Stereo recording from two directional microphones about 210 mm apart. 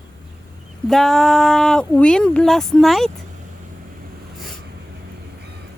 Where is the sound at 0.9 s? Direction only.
Centre (ahead or behind).